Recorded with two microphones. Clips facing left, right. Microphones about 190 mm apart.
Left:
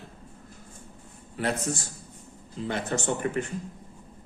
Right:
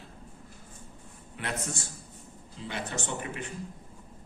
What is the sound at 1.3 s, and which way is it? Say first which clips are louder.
Speech: left 7 dB; 35° left (ahead or behind).